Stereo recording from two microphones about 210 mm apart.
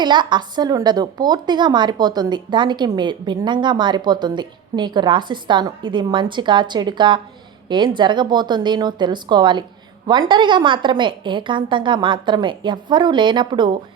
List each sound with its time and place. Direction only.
0.0 s a woman's voice: 20° right (ahead or behind)